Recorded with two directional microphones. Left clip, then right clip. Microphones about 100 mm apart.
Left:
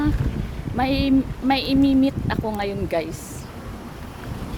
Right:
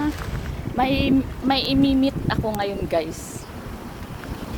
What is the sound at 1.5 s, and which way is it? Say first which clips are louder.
Speech: even; 30° left (ahead or behind).